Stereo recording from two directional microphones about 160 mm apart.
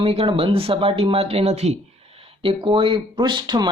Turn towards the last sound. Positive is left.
turn(degrees=-30)  # may be behind; listen again after turning